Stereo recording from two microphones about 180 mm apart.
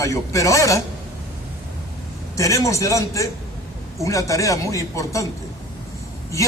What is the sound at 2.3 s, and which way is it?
A man's voice, 15° left (ahead or behind).